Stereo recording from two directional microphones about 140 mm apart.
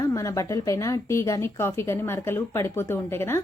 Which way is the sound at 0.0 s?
20° left (ahead or behind).